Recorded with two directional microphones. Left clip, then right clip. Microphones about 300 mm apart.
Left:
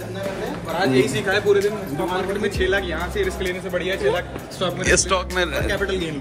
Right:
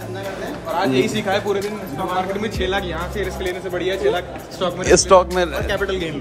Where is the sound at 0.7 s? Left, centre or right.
Right.